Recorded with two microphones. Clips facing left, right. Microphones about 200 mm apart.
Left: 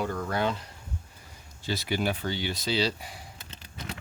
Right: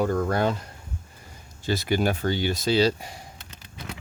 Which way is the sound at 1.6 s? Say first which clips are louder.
Right 5 dB; 45° right (ahead or behind).